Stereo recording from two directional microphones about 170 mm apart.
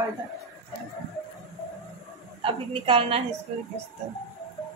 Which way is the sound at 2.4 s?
30° right (ahead or behind).